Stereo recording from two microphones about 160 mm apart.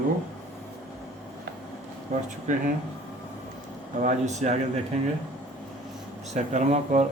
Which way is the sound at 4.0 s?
50° right (ahead or behind).